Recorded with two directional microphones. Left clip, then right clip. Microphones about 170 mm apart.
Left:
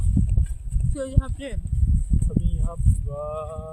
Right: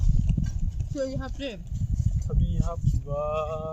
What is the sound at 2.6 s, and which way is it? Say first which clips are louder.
Speech: right 1 dB; 30° right (ahead or behind).